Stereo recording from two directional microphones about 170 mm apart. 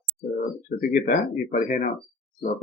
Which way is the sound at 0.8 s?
55° left (ahead or behind).